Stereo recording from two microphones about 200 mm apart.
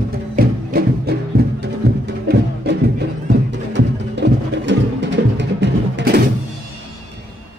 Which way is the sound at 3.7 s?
60° right (ahead or behind).